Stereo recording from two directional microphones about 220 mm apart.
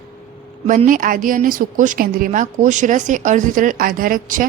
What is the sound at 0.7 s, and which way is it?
A woman's voice, 35° right (ahead or behind).